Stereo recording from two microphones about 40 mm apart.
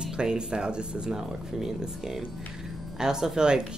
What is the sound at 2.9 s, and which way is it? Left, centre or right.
Speech, centre.